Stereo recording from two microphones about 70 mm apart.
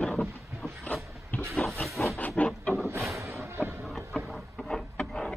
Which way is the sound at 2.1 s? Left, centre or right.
Left.